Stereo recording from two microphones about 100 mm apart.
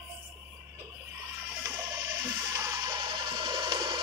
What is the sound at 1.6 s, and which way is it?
Music, 30° right (ahead or behind).